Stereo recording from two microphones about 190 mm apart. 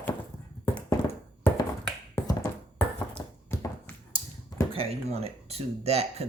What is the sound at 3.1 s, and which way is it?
Tap, 10° left (ahead or behind).